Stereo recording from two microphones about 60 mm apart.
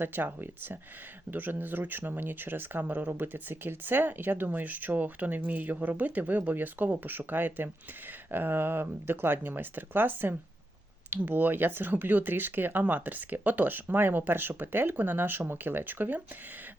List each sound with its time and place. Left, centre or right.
0.0 s speech: right